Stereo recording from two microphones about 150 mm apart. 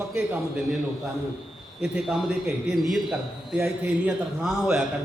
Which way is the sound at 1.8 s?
5° right (ahead or behind).